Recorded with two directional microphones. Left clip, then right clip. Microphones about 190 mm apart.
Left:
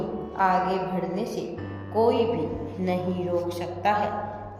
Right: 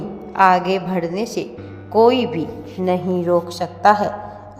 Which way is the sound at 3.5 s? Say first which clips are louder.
Right 10 dB; 30° right (ahead or behind).